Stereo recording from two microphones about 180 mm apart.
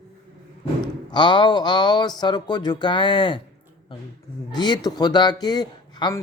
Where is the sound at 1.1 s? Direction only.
25° left (ahead or behind).